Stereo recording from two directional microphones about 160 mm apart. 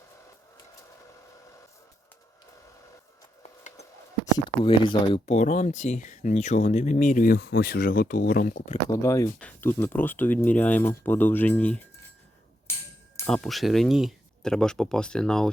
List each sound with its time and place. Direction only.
4.4 s speech: 30° left (ahead or behind); by 7.3 s 55° left (ahead or behind)
7.3 s speech: 80° left; by 8.8 s 50° left (ahead or behind)
8.9 s speech: 20° left (ahead or behind)
13.2 s speech: 5° left (ahead or behind)